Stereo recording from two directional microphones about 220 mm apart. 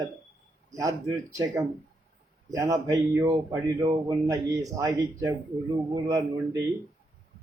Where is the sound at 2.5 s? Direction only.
15° right (ahead or behind).